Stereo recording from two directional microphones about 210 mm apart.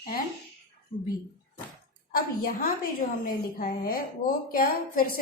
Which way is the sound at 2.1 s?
45° left (ahead or behind).